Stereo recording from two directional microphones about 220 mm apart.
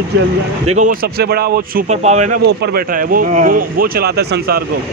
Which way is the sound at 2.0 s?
30° right (ahead or behind).